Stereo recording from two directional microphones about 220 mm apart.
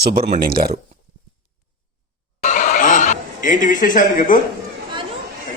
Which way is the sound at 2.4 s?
35° left (ahead or behind).